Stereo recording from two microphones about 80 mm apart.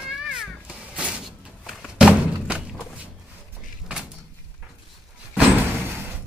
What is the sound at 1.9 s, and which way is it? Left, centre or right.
Thump, centre.